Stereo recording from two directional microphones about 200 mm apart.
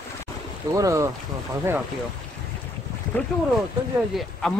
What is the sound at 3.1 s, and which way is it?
Speech, 10° left (ahead or behind).